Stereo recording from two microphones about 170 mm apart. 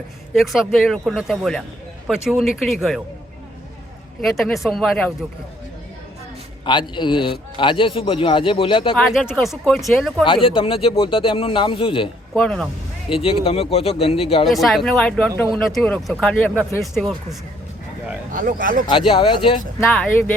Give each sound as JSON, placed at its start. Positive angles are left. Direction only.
{"t": 0.3, "sound": "speech", "side_deg": 0}
{"t": 4.2, "sound": "speech", "side_deg": 0}
{"t": 6.7, "sound": "a man's voice", "side_deg": 25}
{"t": 9.0, "sound": "speech", "side_deg": 0}
{"t": 10.2, "sound": "a man's voice", "side_deg": 30}
{"t": 12.3, "sound": "speech", "side_deg": 5}
{"t": 13.1, "sound": "a man's voice", "side_deg": 30}
{"t": 14.4, "sound": "speech", "side_deg": 0}
{"t": 18.3, "sound": "speech", "side_deg": -50}
{"t": 18.9, "sound": "a man's voice", "side_deg": 30}
{"t": 19.9, "sound": "speech", "side_deg": 10}